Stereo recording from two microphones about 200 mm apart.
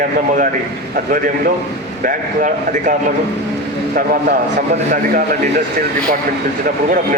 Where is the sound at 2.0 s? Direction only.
40° right (ahead or behind).